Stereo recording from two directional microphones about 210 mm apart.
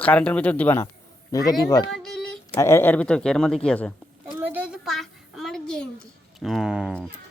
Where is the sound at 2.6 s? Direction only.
10° left (ahead or behind).